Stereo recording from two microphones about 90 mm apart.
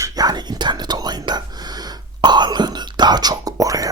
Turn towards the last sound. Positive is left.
turn(degrees=-40)  # may be behind; listen again after turning